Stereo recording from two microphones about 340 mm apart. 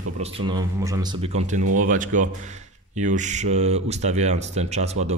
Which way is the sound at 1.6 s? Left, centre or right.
Right.